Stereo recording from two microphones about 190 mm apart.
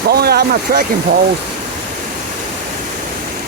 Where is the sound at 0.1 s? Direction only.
55° right (ahead or behind).